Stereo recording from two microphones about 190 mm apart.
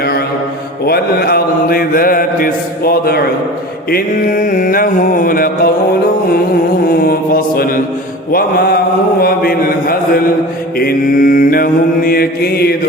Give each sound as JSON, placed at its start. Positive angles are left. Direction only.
{"t": 0.9, "sound": "mantra", "side_deg": 55}
{"t": 6.8, "sound": "mantra", "side_deg": 50}